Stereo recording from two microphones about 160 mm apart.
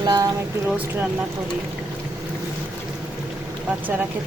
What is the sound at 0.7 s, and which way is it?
Speech, 10° right (ahead or behind).